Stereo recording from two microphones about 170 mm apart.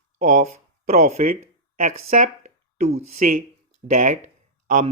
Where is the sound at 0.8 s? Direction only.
50° right (ahead or behind).